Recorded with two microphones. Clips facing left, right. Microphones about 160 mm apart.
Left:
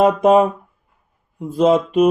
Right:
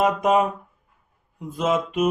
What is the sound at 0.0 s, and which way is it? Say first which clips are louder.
Mantra: left 7 dB; 30° left (ahead or behind).